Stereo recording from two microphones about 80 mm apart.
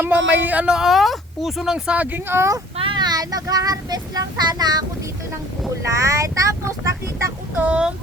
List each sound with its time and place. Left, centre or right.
0.0 s speech: right
0.8 s speech: centre; by 2.5 s right
2.8 s speech: right
5.8 s speech: right
7.5 s speech: centre